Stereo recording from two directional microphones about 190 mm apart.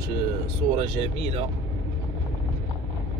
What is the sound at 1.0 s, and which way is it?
Speech, 30° right (ahead or behind).